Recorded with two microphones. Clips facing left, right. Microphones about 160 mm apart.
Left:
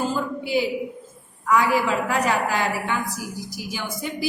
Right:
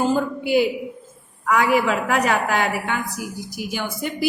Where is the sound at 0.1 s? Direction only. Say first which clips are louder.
Right 5 dB; 55° right (ahead or behind).